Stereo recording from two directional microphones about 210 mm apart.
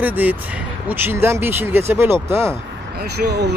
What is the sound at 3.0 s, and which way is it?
Speech, 50° right (ahead or behind).